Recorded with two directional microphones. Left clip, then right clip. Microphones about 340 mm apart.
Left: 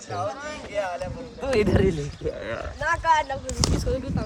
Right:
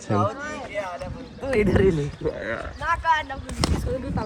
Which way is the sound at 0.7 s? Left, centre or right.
Left.